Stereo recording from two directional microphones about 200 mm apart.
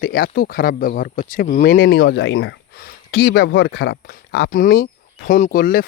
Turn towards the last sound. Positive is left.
turn(degrees=45)  # may be behind; listen again after turning